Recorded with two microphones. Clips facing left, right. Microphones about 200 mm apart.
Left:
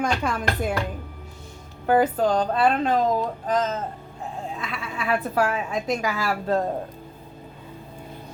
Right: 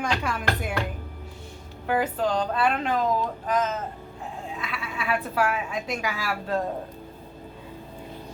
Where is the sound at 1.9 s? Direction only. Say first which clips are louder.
Left 5 dB; 40° left (ahead or behind).